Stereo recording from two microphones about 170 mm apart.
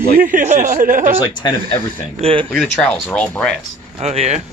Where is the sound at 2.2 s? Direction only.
30° right (ahead or behind).